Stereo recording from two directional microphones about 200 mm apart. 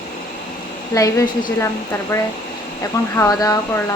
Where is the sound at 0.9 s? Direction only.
15° left (ahead or behind).